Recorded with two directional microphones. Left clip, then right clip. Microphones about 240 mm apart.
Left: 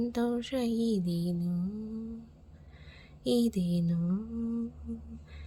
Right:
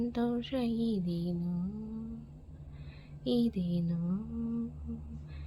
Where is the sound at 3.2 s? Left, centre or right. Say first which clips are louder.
Left 3 dB; left.